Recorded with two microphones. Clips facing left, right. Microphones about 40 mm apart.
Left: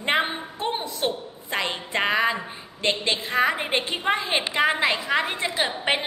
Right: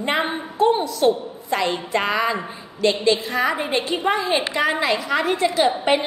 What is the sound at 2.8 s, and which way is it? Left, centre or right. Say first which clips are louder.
A woman's voice: right 6 dB; left.